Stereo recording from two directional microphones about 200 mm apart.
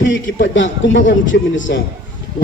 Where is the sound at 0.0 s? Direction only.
65° left (ahead or behind).